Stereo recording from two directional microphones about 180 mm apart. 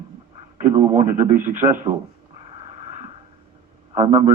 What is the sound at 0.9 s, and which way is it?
A man's voice, 45° right (ahead or behind).